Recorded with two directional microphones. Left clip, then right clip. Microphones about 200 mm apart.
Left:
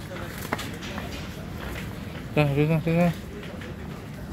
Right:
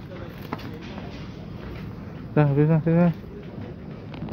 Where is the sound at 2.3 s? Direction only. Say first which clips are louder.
Right 2 dB; 25° right (ahead or behind).